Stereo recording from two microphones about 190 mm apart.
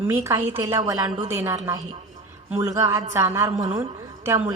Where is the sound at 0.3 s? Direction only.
15° right (ahead or behind).